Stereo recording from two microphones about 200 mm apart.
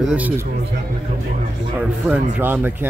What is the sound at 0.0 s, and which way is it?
Speech, 5° right (ahead or behind).